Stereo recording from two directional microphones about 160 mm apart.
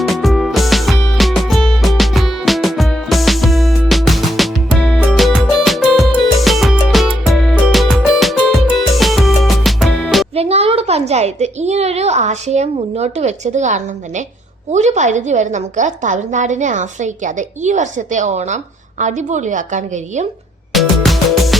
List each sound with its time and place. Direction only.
0.0 s music: centre (ahead or behind)
10.3 s a woman's voice: 40° right (ahead or behind)
20.7 s music: centre (ahead or behind)